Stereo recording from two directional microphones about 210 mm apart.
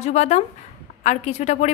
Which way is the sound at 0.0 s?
35° left (ahead or behind).